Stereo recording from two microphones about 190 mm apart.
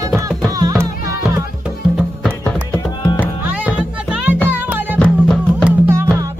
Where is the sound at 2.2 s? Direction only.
10° left (ahead or behind).